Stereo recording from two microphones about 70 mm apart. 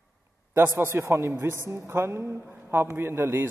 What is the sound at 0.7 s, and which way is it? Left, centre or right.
A man's voice, right.